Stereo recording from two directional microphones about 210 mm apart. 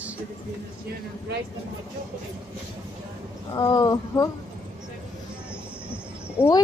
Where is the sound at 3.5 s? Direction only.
20° left (ahead or behind).